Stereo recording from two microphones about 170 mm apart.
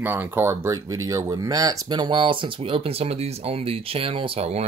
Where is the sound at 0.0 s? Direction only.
10° right (ahead or behind).